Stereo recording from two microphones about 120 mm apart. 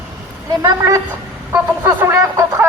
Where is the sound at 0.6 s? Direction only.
25° right (ahead or behind).